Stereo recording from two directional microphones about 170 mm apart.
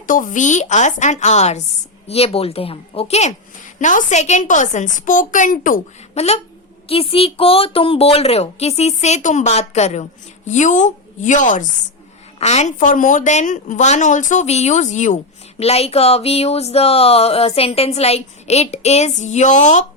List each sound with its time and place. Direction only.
0.1 s a woman's voice: 50° left (ahead or behind)
6.1 s a woman's voice: 40° left (ahead or behind)